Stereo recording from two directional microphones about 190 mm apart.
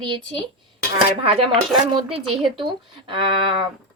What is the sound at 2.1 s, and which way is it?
A woman's voice, 25° right (ahead or behind).